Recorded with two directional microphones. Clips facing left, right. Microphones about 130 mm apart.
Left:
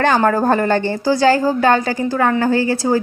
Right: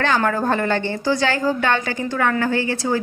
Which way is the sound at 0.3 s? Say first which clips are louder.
Left 5 dB; 40° left (ahead or behind).